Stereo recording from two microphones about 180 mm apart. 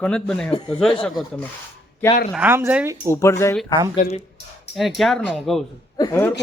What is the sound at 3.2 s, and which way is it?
Speech, 15° left (ahead or behind).